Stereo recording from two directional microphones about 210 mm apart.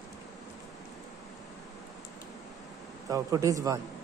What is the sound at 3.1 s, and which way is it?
Speech, 15° right (ahead or behind).